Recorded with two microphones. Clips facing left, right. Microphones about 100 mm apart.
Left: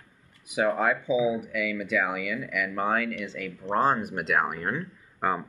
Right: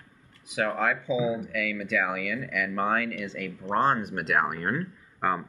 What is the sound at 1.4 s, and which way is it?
Speech, 5° left (ahead or behind).